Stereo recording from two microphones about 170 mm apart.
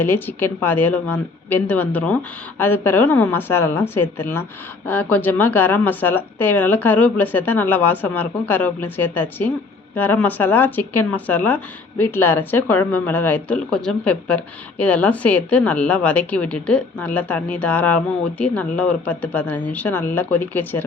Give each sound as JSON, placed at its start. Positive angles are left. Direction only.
{"t": 0.0, "sound": "speech", "side_deg": 10}